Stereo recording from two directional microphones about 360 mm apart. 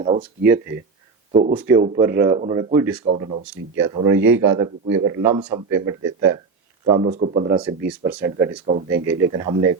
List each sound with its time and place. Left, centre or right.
0.0 s speech: right
2.5 s a man's voice: centre
2.8 s speech: right
3.8 s a man's voice: centre
6.9 s speech: right
7.2 s speech: right
8.9 s speech: right